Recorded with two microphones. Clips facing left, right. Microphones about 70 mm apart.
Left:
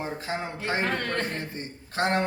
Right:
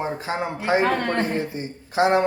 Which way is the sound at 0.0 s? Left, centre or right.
Right.